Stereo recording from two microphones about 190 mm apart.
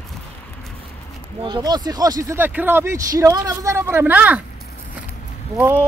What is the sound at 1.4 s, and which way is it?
Speech, 25° right (ahead or behind).